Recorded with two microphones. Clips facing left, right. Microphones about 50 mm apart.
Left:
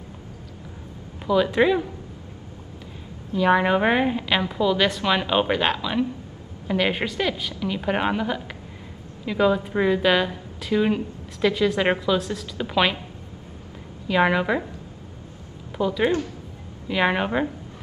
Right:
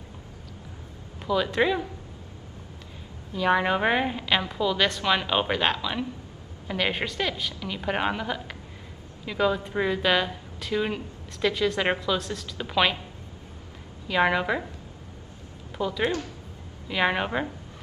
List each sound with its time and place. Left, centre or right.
1.2 s a woman's voice: centre
3.3 s a woman's voice: centre
14.0 s a woman's voice: centre
15.8 s a woman's voice: centre